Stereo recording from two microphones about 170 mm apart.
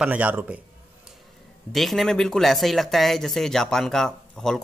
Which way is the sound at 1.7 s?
Centre (ahead or behind).